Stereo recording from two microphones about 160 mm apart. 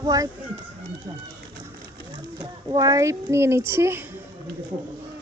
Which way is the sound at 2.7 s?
25° right (ahead or behind).